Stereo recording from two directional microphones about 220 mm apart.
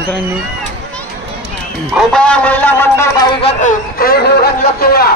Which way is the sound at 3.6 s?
40° left (ahead or behind).